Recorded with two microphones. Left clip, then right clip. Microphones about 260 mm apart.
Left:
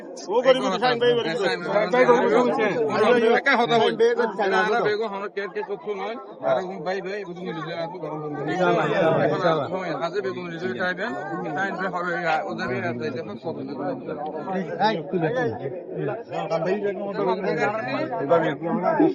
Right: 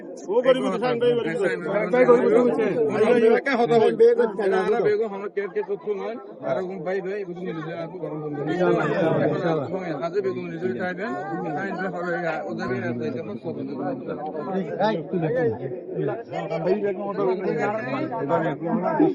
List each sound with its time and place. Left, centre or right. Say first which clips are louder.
0.3 s a man's voice: left 1 dB; centre
8.6 s a man's voice: left 2 dB; centre
17.2 s a man's voice: left 1 dB; centre
18.2 s a man's voice: left 4 dB; left